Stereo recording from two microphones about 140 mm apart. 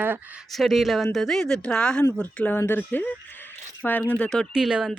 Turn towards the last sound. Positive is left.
turn(degrees=-5)  # may be behind; listen again after turning